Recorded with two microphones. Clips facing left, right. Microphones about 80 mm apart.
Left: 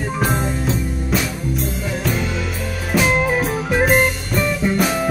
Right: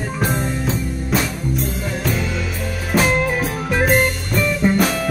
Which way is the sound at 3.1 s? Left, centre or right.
Centre.